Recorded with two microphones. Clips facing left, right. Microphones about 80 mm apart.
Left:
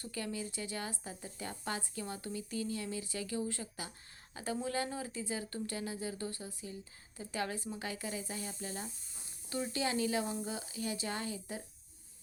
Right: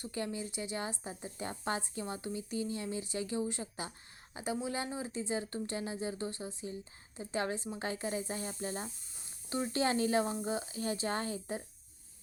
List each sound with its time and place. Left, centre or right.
0.0 s speech: right
4.5 s speech: centre; by 11.6 s right